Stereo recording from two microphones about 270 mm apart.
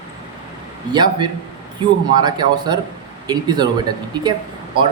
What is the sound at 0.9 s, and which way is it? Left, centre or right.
A man's voice, centre.